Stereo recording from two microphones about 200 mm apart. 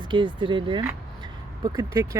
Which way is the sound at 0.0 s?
25° right (ahead or behind).